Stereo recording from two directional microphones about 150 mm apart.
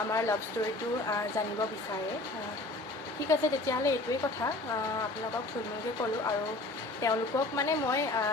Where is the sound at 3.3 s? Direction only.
20° left (ahead or behind).